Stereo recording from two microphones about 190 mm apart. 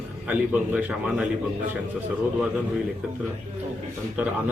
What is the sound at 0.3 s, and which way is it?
A man's voice, 10° right (ahead or behind).